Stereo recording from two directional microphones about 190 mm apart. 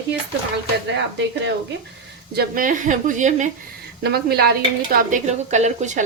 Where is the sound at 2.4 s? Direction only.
45° right (ahead or behind).